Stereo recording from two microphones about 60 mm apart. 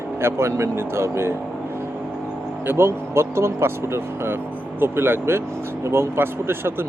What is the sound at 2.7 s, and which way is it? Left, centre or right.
Speech, right.